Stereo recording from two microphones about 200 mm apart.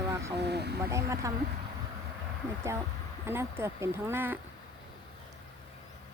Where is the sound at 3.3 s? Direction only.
10° right (ahead or behind).